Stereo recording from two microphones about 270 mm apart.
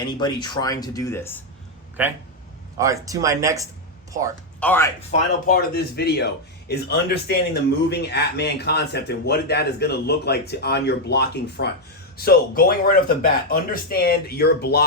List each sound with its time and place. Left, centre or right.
0.1 s speech: centre
2.0 s speech: centre
4.6 s speech: centre
5.5 s a man's voice: left